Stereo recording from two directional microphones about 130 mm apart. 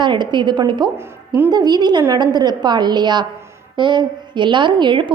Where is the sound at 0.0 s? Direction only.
35° right (ahead or behind).